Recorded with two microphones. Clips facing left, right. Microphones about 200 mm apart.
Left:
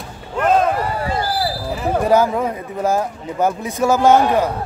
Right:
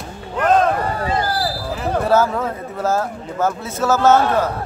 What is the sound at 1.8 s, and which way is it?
Speech, 10° left (ahead or behind).